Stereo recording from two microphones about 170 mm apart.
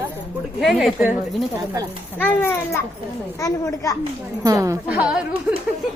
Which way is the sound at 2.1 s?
10° left (ahead or behind).